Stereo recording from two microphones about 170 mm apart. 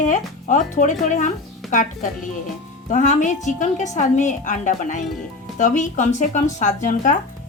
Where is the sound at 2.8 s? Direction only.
45° left (ahead or behind).